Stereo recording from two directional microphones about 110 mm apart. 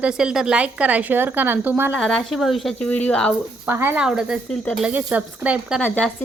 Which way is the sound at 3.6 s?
20° right (ahead or behind).